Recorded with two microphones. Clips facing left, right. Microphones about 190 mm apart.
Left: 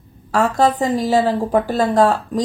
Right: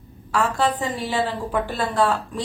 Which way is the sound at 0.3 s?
40° left (ahead or behind).